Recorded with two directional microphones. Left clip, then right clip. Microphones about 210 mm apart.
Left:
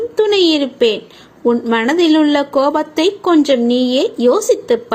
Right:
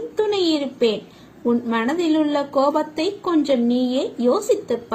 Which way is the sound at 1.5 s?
20° left (ahead or behind).